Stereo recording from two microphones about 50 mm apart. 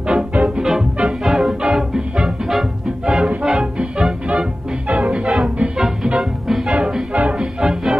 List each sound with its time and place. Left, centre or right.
0.1 s music: centre
5.8 s music: centre
7.6 s music: centre